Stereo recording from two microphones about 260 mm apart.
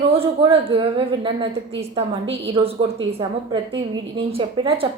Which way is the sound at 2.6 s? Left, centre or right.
Centre.